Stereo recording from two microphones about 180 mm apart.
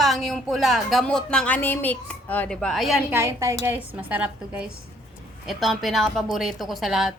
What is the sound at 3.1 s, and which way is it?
A woman's voice, 15° right (ahead or behind).